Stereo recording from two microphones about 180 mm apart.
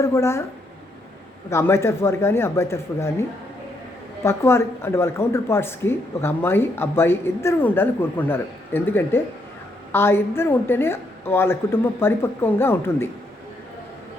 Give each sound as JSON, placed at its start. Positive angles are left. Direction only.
{"t": 0.0, "sound": "speech", "side_deg": 15}
{"t": 1.5, "sound": "speech", "side_deg": 15}